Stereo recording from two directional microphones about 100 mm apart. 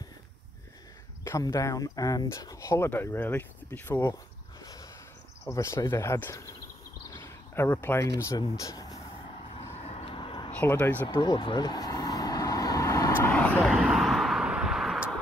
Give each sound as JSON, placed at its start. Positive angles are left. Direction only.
{"t": 1.4, "sound": "speech", "side_deg": 35}
{"t": 5.4, "sound": "speech", "side_deg": 30}
{"t": 7.2, "sound": "a sound", "side_deg": 25}
{"t": 8.0, "sound": "speech", "side_deg": 35}
{"t": 9.8, "sound": "vehicle", "side_deg": 90}
{"t": 10.6, "sound": "speech", "side_deg": 15}
{"t": 11.1, "sound": "speech", "side_deg": 55}
{"t": 11.6, "sound": "vehicle", "side_deg": 40}
{"t": 13.4, "sound": "vehicle", "side_deg": 15}
{"t": 13.7, "sound": "vehicle", "side_deg": 0}